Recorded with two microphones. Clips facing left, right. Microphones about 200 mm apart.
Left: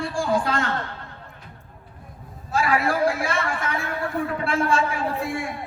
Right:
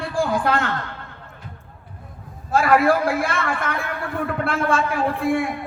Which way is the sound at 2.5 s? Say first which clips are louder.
Right 5 dB; 55° right (ahead or behind).